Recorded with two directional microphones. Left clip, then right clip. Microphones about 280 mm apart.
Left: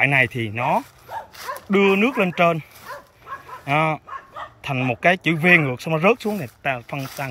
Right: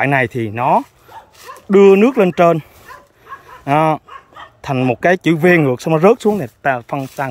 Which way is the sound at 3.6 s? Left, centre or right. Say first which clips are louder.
Right 7 dB; right.